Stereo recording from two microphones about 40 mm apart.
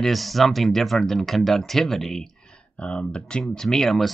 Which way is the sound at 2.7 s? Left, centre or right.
Left.